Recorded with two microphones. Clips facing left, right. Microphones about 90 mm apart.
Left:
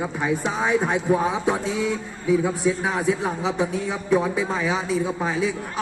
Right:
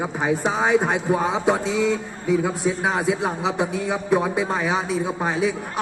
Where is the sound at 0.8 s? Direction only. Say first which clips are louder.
Even; 20° right (ahead or behind).